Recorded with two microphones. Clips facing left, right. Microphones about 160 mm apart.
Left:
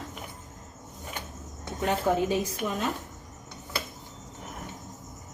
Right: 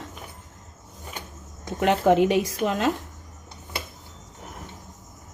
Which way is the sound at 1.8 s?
75° right (ahead or behind).